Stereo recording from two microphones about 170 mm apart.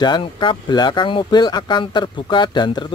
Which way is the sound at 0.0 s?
25° left (ahead or behind).